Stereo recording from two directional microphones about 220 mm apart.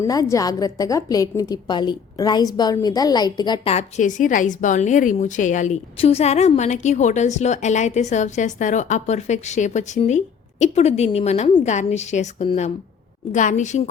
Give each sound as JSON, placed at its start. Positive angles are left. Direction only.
{"t": 0.0, "sound": "a woman's voice", "side_deg": 15}